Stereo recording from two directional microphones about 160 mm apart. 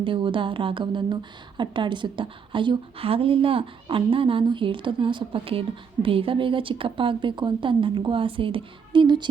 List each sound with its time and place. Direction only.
0.0 s speech: 30° right (ahead or behind)